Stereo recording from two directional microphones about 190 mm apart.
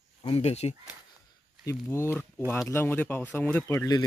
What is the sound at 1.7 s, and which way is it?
Speech, 15° left (ahead or behind).